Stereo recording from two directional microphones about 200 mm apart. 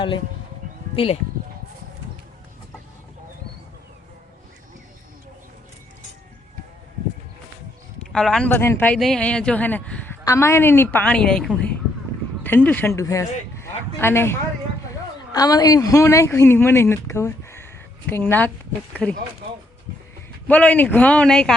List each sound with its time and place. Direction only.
0.9 s speech: 30° left (ahead or behind)
8.1 s speech: 5° left (ahead or behind)
13.6 s a sound: 10° left (ahead or behind)
15.3 s speech: 20° left (ahead or behind)
20.5 s speech: 5° left (ahead or behind)